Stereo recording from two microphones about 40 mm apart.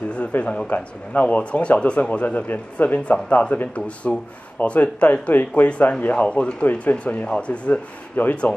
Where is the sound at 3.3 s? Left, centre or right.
Left.